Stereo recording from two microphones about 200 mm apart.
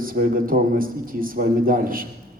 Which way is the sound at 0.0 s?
45° right (ahead or behind).